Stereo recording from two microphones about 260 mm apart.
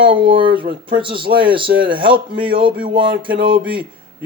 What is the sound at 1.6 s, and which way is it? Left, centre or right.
Speech, right.